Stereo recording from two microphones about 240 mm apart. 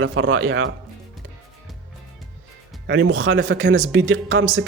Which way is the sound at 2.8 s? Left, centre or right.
Right.